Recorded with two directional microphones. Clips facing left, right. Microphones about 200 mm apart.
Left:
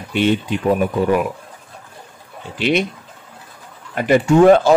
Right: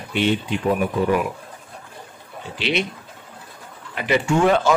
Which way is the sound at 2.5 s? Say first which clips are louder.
Left 5 dB; 50° left (ahead or behind).